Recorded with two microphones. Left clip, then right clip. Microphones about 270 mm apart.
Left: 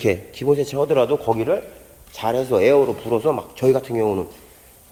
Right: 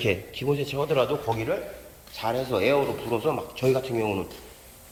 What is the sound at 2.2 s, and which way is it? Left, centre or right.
Speech, left.